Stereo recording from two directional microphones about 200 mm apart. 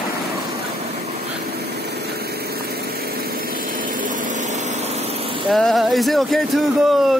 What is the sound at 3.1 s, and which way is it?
Vehicle, 45° right (ahead or behind).